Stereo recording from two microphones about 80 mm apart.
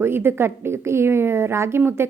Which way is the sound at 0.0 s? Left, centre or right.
Right.